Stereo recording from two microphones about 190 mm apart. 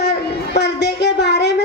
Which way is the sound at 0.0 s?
60° left (ahead or behind).